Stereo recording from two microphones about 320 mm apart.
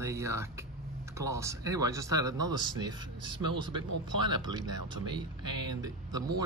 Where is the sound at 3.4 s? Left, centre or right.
Right.